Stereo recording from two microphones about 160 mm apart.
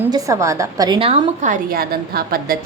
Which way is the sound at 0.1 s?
20° right (ahead or behind).